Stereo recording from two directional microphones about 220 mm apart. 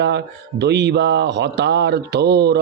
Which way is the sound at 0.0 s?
50° right (ahead or behind).